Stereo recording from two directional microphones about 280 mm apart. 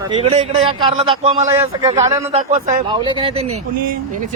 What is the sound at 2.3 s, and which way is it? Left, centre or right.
A man's voice, right.